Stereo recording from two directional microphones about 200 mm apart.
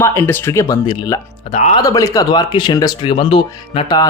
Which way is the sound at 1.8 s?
15° left (ahead or behind).